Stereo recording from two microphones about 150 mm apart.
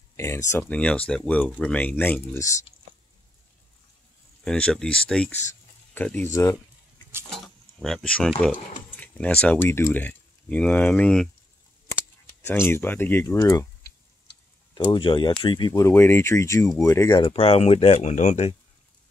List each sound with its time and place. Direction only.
0.1 s speech: 20° left (ahead or behind)
4.5 s speech: 5° left (ahead or behind)
7.8 s speech: 5° left (ahead or behind)
12.4 s speech: 15° left (ahead or behind)
14.7 s speech: 30° left (ahead or behind)
17.1 s speech: 35° left (ahead or behind)